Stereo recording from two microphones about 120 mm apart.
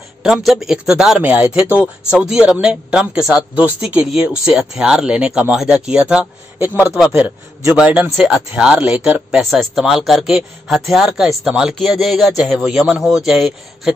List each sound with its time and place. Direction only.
0.2 s speech: centre (ahead or behind)